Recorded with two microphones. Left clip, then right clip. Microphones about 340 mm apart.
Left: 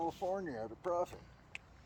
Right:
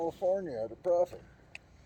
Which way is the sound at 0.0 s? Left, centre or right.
Left.